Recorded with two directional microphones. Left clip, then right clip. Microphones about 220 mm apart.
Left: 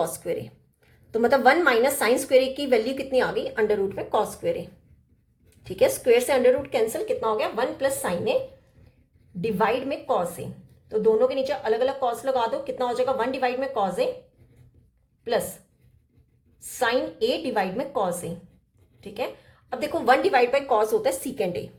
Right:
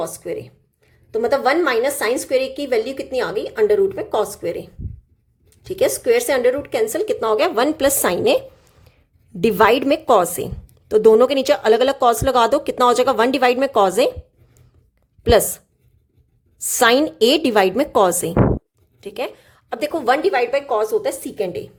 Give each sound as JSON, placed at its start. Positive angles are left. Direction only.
{"t": 0.0, "sound": "a woman's voice", "side_deg": -10}
{"t": 9.4, "sound": "a woman's voice", "side_deg": -45}
{"t": 16.7, "sound": "a woman's voice", "side_deg": -45}